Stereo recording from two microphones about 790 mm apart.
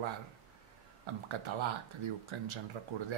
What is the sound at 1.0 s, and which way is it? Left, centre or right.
Speech, right.